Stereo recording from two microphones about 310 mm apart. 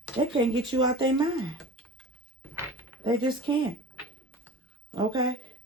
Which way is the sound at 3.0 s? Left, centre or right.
Centre.